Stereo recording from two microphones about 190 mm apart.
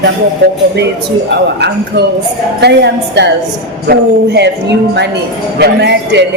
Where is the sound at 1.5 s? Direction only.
60° right (ahead or behind).